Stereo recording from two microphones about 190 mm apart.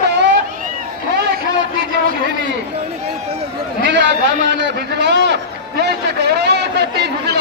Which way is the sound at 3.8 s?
70° right (ahead or behind).